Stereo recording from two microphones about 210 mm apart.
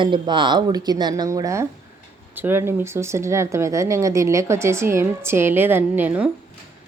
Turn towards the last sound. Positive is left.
turn(degrees=-5)  # may be behind; listen again after turning